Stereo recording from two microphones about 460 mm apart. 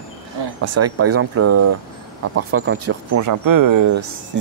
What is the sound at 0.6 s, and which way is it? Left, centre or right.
Speech, right.